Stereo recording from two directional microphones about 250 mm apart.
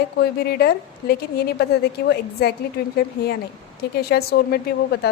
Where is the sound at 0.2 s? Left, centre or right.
Left.